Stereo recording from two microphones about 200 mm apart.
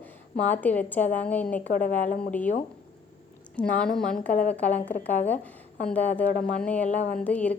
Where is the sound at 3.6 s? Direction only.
5° left (ahead or behind).